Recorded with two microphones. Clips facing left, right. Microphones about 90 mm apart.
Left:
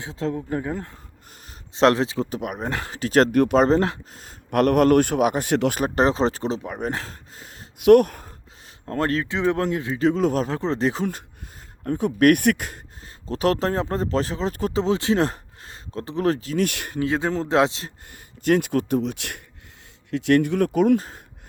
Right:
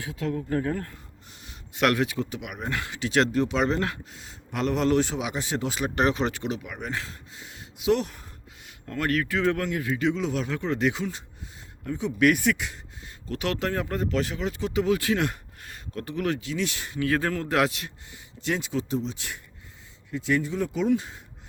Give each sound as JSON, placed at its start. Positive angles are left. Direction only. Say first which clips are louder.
{"t": 0.0, "sound": "speech", "louder": "left 3 dB", "side_deg": 30}
{"t": 3.3, "sound": "speech", "louder": "left 7 dB", "side_deg": 60}
{"t": 3.6, "sound": "speech", "louder": "left 7 dB", "side_deg": 35}
{"t": 5.8, "sound": "speech", "louder": "left 5 dB", "side_deg": 30}
{"t": 7.8, "sound": "speech", "louder": "left 11 dB", "side_deg": 55}
{"t": 8.9, "sound": "speech", "louder": "left 3 dB", "side_deg": 30}
{"t": 10.0, "sound": "speech", "louder": "left 9 dB", "side_deg": 45}
{"t": 11.9, "sound": "speech", "louder": "left 5 dB", "side_deg": 50}
{"t": 13.2, "sound": "speech", "louder": "left 7 dB", "side_deg": 35}
{"t": 14.8, "sound": "speech", "louder": "left 3 dB", "side_deg": 30}
{"t": 17.0, "sound": "speech", "louder": "left 3 dB", "side_deg": 20}
{"t": 18.1, "sound": "speech", "louder": "left 9 dB", "side_deg": 55}